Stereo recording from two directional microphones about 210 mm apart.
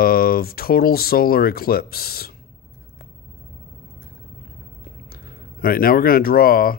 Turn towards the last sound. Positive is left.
turn(degrees=45)  # may be behind; listen again after turning